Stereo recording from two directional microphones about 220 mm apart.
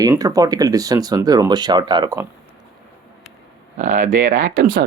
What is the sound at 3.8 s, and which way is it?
Speech, 35° right (ahead or behind).